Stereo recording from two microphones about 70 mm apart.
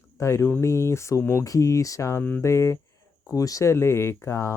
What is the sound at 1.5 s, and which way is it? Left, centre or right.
Speech, left.